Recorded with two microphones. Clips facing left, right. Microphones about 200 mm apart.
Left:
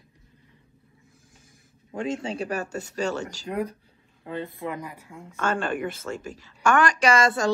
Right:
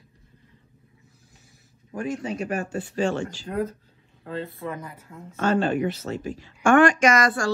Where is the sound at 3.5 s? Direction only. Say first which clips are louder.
Even; 15° left (ahead or behind).